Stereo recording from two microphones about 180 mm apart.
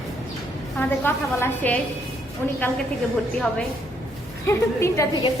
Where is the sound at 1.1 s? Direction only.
10° left (ahead or behind).